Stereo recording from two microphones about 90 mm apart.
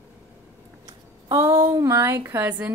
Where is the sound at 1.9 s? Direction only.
30° right (ahead or behind).